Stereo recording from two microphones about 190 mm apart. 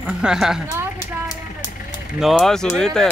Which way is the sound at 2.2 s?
5° left (ahead or behind).